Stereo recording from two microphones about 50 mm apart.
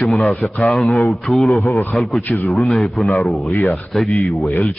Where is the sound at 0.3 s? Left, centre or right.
Centre.